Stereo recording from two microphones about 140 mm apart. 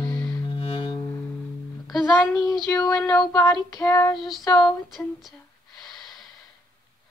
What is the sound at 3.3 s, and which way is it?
Child singing, 25° left (ahead or behind).